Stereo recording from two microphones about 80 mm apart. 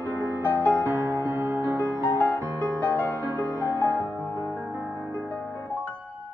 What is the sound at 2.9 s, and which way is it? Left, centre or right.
Music, left.